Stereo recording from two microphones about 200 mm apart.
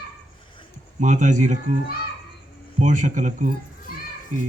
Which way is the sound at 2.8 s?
40° right (ahead or behind).